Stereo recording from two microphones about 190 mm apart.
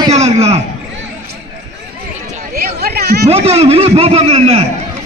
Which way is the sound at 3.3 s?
35° right (ahead or behind).